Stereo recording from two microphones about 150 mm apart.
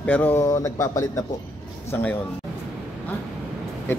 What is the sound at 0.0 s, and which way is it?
Speech, 10° left (ahead or behind).